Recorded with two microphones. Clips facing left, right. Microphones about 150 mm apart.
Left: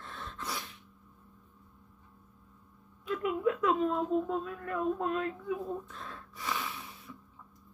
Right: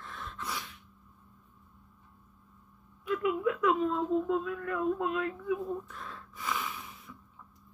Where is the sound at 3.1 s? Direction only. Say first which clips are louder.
Right 1 dB; 35° left (ahead or behind).